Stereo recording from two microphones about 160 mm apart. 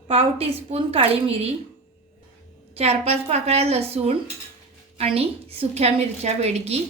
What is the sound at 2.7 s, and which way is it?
A woman's voice, 40° right (ahead or behind).